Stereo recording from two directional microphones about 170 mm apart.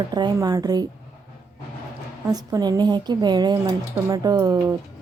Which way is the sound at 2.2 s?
20° right (ahead or behind).